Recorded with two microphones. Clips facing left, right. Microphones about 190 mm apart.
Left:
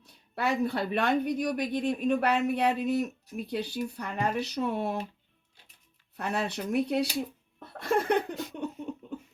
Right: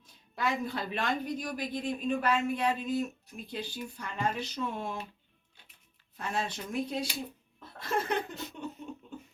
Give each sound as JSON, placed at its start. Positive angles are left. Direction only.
{"t": 0.0, "sound": "speech", "side_deg": 65}
{"t": 6.1, "sound": "speech", "side_deg": 65}
{"t": 7.6, "sound": "laughter", "side_deg": 60}